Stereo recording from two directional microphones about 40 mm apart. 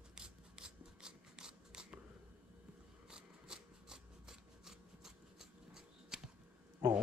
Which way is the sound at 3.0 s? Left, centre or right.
Centre.